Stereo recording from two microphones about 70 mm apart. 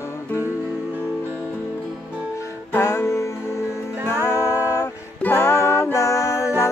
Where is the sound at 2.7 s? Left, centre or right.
Left.